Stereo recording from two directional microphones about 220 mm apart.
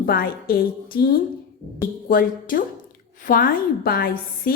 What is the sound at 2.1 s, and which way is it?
A woman's voice, 40° left (ahead or behind).